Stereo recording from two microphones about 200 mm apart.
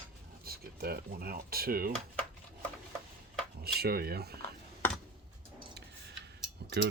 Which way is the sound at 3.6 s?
50° right (ahead or behind).